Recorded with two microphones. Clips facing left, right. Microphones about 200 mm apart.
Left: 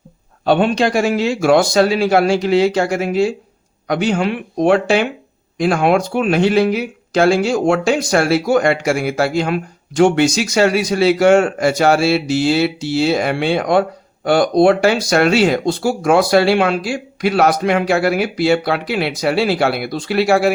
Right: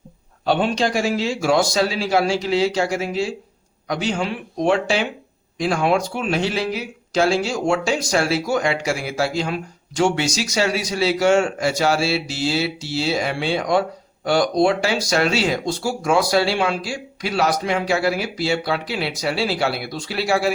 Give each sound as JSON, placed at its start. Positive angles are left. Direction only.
{"t": 0.4, "sound": "speech", "side_deg": 55}